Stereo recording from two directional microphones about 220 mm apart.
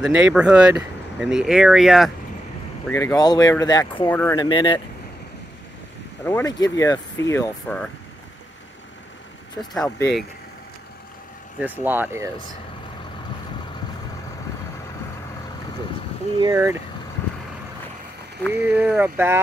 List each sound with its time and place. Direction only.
0.0 s speech: 5° right (ahead or behind)
2.9 s speech: 15° left (ahead or behind)
4.4 s speech: 20° left (ahead or behind)
6.2 s speech: 15° left (ahead or behind)
9.6 s speech: 5° left (ahead or behind)
11.6 s speech: 10° right (ahead or behind)
16.3 s speech: 15° right (ahead or behind)
18.5 s speech: 10° right (ahead or behind)